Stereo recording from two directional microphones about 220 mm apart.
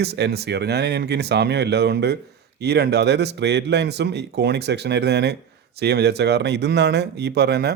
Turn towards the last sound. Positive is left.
turn(degrees=-50)  # may be behind; listen again after turning